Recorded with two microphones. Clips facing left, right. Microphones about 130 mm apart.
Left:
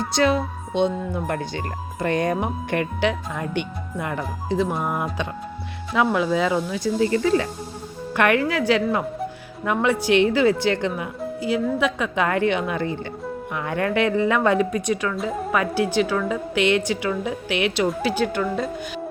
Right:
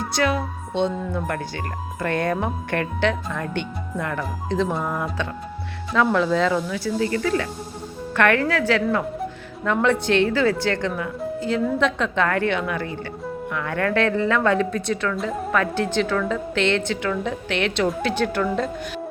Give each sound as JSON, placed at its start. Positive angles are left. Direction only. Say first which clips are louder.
{"t": 0.1, "sound": "music", "louder": "left 3 dB", "side_deg": 25}
{"t": 0.7, "sound": "a woman's voice", "louder": "left 1 dB", "side_deg": 15}
{"t": 9.7, "sound": "a woman's voice", "louder": "left 1 dB", "side_deg": 5}
{"t": 15.1, "sound": "a woman's voice", "louder": "even", "side_deg": 0}